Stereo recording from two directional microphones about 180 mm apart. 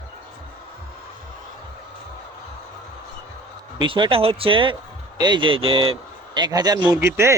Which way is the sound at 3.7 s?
25° right (ahead or behind).